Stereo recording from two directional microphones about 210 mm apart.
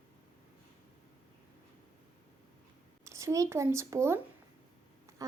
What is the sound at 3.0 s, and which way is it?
Speech, 15° right (ahead or behind).